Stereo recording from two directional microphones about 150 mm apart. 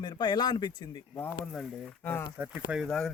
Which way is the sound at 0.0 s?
30° left (ahead or behind).